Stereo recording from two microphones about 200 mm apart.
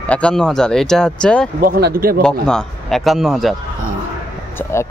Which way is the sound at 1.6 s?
50° right (ahead or behind).